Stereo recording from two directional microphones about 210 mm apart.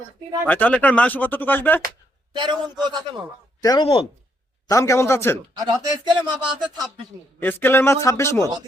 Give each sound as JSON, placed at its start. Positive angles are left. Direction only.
{"t": 0.4, "sound": "speech", "side_deg": 5}
{"t": 2.3, "sound": "a man's voice", "side_deg": -20}
{"t": 3.6, "sound": "speech", "side_deg": 20}
{"t": 5.9, "sound": "a man's voice", "side_deg": -20}
{"t": 7.3, "sound": "speech", "side_deg": 10}